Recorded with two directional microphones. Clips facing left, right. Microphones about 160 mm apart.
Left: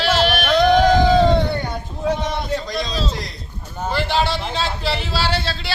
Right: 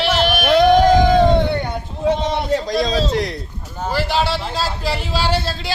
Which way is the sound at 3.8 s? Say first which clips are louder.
Right 1 dB; 5° right (ahead or behind).